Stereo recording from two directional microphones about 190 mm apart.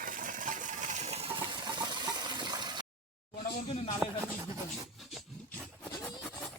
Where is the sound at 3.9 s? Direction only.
5° right (ahead or behind).